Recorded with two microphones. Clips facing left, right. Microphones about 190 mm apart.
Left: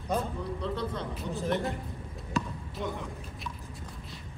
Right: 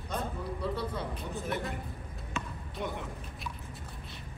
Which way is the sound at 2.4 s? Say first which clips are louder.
Left 7 dB; 35° left (ahead or behind).